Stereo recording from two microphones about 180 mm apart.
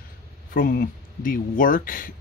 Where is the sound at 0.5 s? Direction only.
55° left (ahead or behind).